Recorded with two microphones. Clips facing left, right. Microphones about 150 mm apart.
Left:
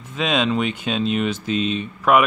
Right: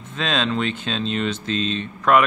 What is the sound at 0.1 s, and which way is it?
Speech, 10° left (ahead or behind).